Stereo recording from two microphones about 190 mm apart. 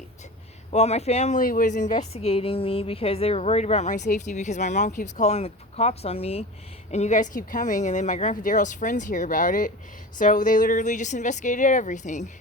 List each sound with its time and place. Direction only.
0.7 s a woman's voice: 35° left (ahead or behind)